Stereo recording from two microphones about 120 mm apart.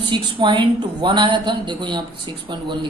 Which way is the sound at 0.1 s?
40° right (ahead or behind).